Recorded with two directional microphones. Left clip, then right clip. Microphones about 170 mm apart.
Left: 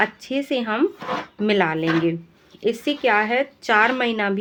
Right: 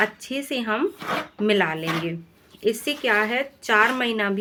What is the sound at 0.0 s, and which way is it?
Speech, 30° left (ahead or behind).